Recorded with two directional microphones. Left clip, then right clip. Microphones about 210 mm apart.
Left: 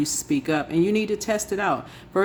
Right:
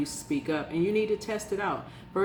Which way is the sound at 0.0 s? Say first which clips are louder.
Left 7 dB; 60° left (ahead or behind).